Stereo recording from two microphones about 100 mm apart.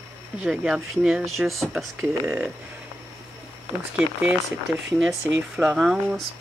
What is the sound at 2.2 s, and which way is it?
Speech, 15° right (ahead or behind).